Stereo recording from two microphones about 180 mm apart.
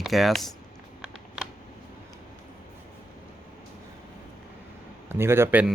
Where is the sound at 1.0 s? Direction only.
5° right (ahead or behind).